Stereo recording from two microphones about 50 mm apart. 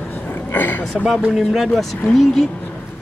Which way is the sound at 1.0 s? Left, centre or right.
Centre.